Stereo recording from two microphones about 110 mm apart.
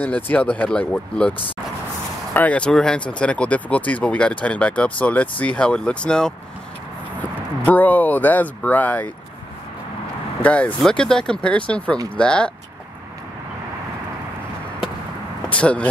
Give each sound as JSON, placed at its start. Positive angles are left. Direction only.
{"t": 0.0, "sound": "speech", "side_deg": 15}
{"t": 2.3, "sound": "speech", "side_deg": 15}
{"t": 10.4, "sound": "speech", "side_deg": 10}
{"t": 15.5, "sound": "speech", "side_deg": 10}